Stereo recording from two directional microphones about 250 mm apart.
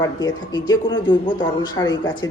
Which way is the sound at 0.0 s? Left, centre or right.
Centre.